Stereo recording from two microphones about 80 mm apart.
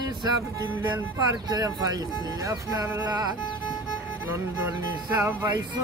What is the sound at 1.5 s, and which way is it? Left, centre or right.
Speech, right.